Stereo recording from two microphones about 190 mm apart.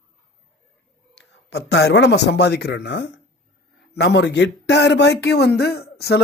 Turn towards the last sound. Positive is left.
turn(degrees=60)  # may be behind; listen again after turning